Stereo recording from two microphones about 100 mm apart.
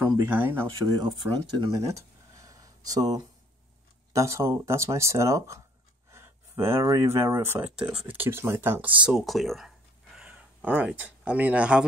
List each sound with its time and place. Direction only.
0.2 s speech: 20° right (ahead or behind)
0.9 s speech: 50° right (ahead or behind)
1.8 s a sound: 30° right (ahead or behind)
4.1 s speech: 30° right (ahead or behind)
6.1 s a sound: 25° right (ahead or behind)
6.9 s speech: 30° right (ahead or behind)
9.2 s speech: centre (ahead or behind)
10.1 s speech: 10° right (ahead or behind)